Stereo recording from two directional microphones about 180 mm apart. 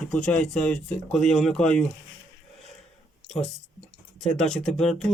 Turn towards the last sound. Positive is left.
turn(degrees=5)  # may be behind; listen again after turning